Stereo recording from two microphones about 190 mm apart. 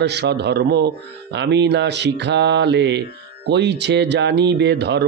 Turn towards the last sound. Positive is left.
turn(degrees=-60)  # may be behind; listen again after turning